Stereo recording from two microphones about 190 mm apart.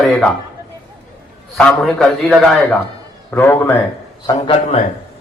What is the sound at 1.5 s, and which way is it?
A man's voice, 5° left (ahead or behind).